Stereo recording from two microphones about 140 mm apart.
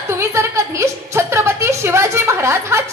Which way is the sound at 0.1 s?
20° right (ahead or behind).